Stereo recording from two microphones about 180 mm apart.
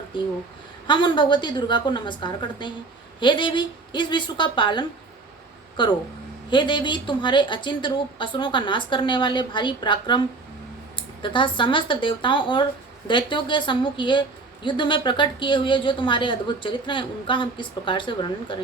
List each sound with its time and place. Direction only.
0.1 s a woman's voice: 25° left (ahead or behind)